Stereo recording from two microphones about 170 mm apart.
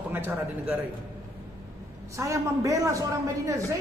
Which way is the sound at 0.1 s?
10° right (ahead or behind).